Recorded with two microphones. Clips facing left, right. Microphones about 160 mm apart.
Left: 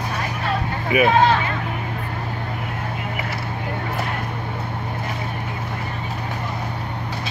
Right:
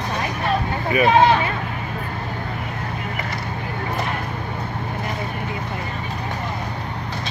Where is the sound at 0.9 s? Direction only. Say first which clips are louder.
Left 1 dB; 10° left (ahead or behind).